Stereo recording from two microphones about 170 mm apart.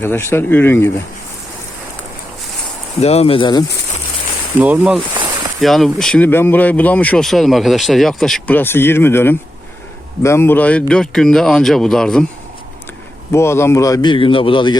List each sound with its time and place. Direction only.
0.0 s speech: 15° left (ahead or behind)
3.0 s speech: 40° left (ahead or behind)
4.6 s a man's voice: 10° right (ahead or behind)
13.3 s a man's voice: 15° left (ahead or behind)